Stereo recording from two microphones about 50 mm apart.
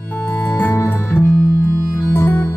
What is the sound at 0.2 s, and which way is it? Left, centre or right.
Music, left.